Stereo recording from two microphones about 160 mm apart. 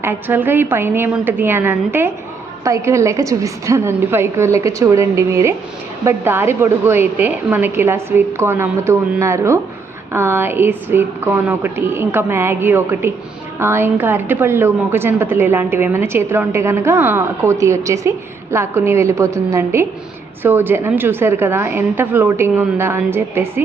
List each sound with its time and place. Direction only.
0.0 s a woman's voice: 15° right (ahead or behind)